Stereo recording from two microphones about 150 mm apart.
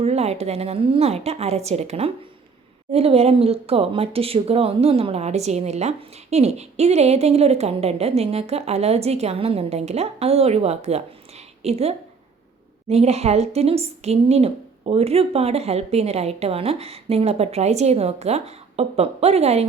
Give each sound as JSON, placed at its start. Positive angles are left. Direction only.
{"t": 0.0, "sound": "speech", "side_deg": -45}